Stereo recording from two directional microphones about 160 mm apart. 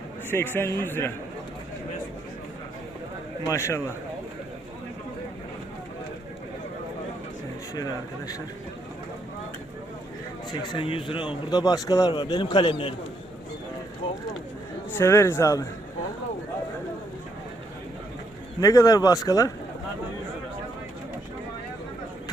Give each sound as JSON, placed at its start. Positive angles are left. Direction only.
{"t": 0.3, "sound": "a man's voice", "side_deg": 15}
{"t": 3.5, "sound": "a man's voice", "side_deg": 15}
{"t": 10.5, "sound": "speech", "side_deg": 25}
{"t": 14.9, "sound": "a man's voice", "side_deg": 15}
{"t": 18.6, "sound": "speech", "side_deg": 20}